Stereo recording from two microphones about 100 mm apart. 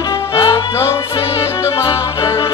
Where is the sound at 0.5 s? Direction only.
25° left (ahead or behind).